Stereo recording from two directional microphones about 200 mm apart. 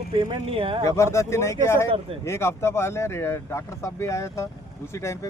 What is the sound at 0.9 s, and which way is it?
Speech, 15° left (ahead or behind).